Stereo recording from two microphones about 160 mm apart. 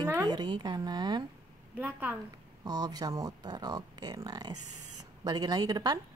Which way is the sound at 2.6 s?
25° right (ahead or behind).